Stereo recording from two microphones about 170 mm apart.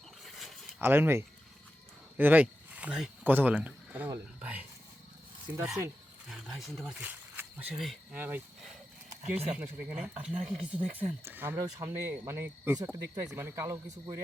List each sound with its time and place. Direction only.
0.3 s a sound: centre (ahead or behind)
0.8 s speech: 15° right (ahead or behind)
6.3 s speech: centre (ahead or behind)
9.6 s speech: 5° right (ahead or behind)